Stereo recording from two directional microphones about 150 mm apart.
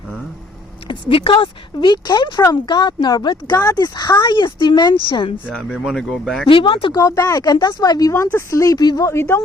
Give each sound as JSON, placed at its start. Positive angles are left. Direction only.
{"t": 0.9, "sound": "speech", "side_deg": 35}
{"t": 5.5, "sound": "speech", "side_deg": -5}
{"t": 6.5, "sound": "speech", "side_deg": 35}
{"t": 7.0, "sound": "speech", "side_deg": 20}